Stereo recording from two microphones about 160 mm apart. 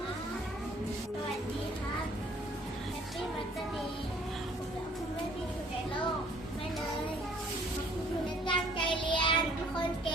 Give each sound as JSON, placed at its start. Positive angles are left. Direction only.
{"t": 8.4, "sound": "child singing", "side_deg": 30}